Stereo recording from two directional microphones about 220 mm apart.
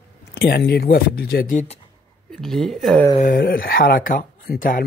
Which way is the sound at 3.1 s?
40° left (ahead or behind).